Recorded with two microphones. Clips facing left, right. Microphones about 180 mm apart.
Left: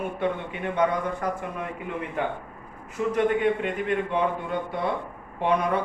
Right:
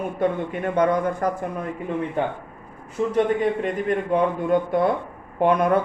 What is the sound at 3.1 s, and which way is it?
Speech, 40° right (ahead or behind).